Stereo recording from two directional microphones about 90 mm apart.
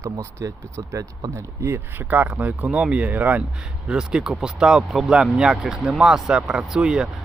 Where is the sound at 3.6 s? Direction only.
5° right (ahead or behind).